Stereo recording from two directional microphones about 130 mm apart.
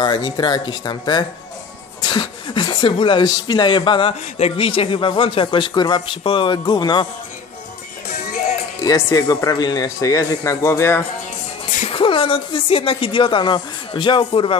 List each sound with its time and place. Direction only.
0.0 s a man's voice: 35° left (ahead or behind)
8.8 s a man's voice: 25° left (ahead or behind)
11.9 s a man's voice: 40° left (ahead or behind)